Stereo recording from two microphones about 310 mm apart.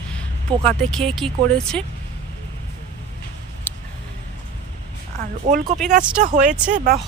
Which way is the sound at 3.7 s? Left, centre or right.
Centre.